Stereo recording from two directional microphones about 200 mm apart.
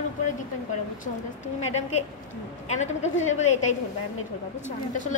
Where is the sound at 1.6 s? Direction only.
35° left (ahead or behind).